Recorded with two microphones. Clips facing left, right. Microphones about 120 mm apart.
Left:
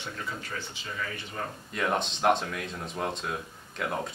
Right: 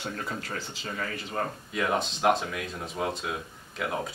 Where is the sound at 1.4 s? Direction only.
55° right (ahead or behind).